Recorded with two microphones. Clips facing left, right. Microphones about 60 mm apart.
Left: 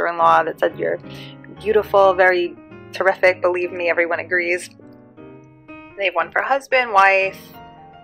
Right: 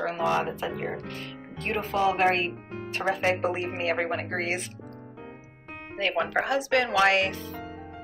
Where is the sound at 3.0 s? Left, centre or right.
Left.